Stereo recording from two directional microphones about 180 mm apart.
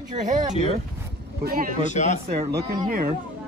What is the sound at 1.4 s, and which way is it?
Speech, 50° right (ahead or behind).